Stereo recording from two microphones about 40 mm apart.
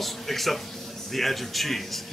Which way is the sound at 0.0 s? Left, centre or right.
Centre.